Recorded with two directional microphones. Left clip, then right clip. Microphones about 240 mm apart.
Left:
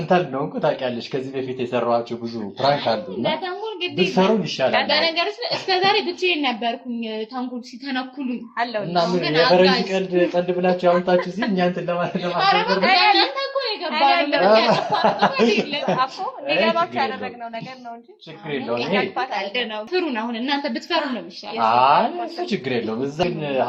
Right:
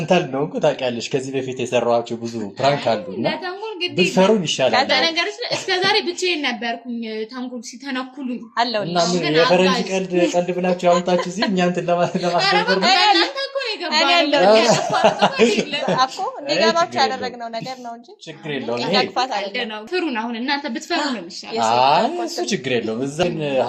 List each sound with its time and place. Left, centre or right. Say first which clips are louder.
0.1 s speech: right 1 dB; right
3.2 s a woman's voice: left 1 dB; right
4.1 s speech: right 4 dB; right
4.9 s a woman's voice: right 1 dB; right
8.5 s speech: right 3 dB; right
9.2 s a woman's voice: right 3 dB; centre
9.9 s speech: right 1 dB; right
11.3 s speech: right 2 dB; right
13.1 s a sound: even; right
13.9 s speech: right 2 dB; right
18.9 s speech: right 6 dB; right
19.3 s a woman's voice: right 1 dB; right
21.5 s speech: even; right